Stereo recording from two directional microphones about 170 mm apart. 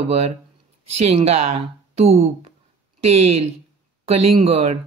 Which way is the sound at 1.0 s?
40° right (ahead or behind).